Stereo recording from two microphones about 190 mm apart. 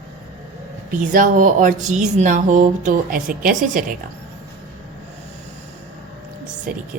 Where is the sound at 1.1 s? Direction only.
45° right (ahead or behind).